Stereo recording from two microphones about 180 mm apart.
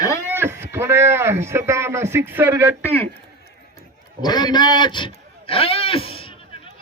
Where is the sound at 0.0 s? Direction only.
15° left (ahead or behind).